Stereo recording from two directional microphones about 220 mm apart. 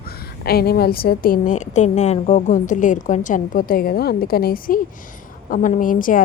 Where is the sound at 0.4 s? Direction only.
45° left (ahead or behind).